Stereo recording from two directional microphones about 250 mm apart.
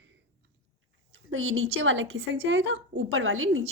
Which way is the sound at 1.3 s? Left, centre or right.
Right.